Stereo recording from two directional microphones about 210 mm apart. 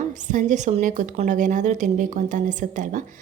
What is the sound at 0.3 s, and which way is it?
A woman's voice, 35° right (ahead or behind).